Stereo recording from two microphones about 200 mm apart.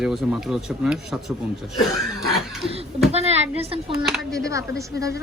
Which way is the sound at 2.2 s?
Centre (ahead or behind).